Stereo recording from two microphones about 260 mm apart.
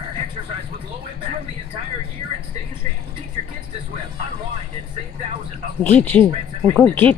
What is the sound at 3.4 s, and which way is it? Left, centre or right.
Speech, right.